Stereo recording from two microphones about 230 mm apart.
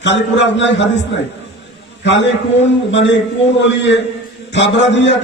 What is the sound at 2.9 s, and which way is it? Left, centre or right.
A man's voice, left.